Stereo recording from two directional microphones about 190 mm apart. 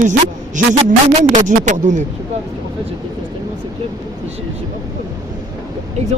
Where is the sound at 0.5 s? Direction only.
40° right (ahead or behind).